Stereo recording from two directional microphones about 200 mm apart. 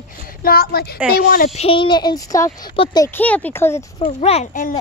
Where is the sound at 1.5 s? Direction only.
30° left (ahead or behind).